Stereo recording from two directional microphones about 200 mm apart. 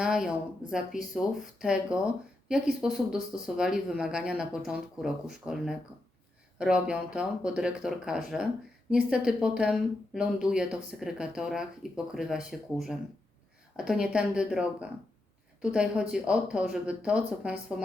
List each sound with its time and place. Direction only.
0.0 s speech: 5° right (ahead or behind)